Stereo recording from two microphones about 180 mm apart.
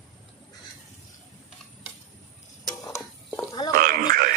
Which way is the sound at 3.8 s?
55° right (ahead or behind).